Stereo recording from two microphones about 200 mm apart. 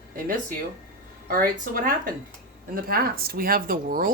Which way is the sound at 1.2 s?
45° right (ahead or behind).